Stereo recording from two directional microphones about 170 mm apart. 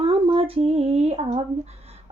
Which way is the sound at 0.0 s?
35° right (ahead or behind).